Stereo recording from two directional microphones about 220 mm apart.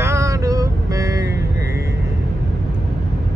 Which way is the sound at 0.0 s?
15° right (ahead or behind).